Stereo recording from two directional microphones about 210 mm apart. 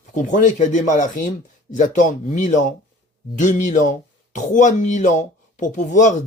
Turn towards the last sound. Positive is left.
turn(degrees=35)  # may be behind; listen again after turning